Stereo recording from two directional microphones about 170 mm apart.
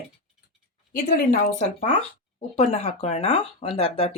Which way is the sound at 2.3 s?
40° left (ahead or behind).